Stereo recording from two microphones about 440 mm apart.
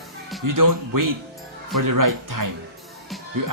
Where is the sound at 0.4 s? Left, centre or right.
Right.